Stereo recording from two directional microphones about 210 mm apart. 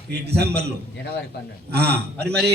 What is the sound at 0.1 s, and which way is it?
Speech, 50° right (ahead or behind).